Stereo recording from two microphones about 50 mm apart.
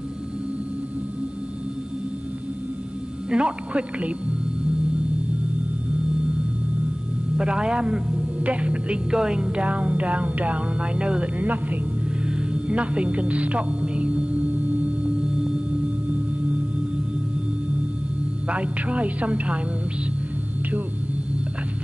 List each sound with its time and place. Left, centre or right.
3.3 s speech: right
7.3 s speech: centre; by 11.8 s right
12.3 s music: right
18.5 s speech: right